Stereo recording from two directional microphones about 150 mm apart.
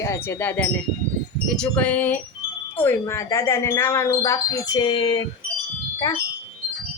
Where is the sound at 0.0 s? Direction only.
15° left (ahead or behind); by 5.2 s 35° left (ahead or behind).